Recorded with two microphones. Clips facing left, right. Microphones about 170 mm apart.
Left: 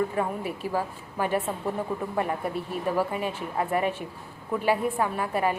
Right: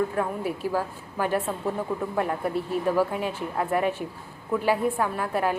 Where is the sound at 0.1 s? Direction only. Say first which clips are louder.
Right 1 dB; centre (ahead or behind).